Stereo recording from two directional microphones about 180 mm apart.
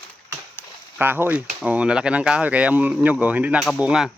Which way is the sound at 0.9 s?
10° right (ahead or behind).